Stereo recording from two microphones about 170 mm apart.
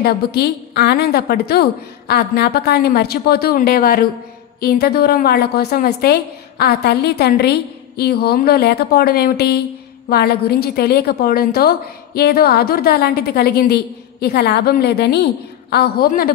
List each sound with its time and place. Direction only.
0.0 s a woman's voice: 70° left (ahead or behind)
16.1 s a woman's voice: 60° left (ahead or behind)